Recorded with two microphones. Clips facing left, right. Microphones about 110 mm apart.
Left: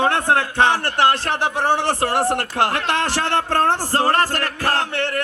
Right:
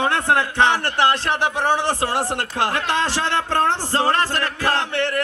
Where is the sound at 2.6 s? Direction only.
60° left (ahead or behind); by 5.1 s 45° left (ahead or behind).